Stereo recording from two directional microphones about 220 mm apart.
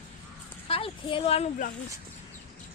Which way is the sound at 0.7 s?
25° left (ahead or behind).